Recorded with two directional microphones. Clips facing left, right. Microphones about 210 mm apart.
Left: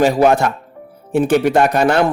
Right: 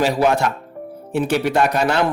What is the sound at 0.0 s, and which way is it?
A man's voice, 50° left (ahead or behind).